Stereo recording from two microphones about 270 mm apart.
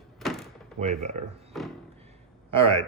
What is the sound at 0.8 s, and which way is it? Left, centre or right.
Speech, right.